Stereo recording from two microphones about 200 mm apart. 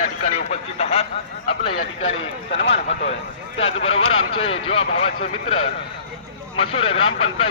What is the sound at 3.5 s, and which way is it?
Speech, 30° left (ahead or behind).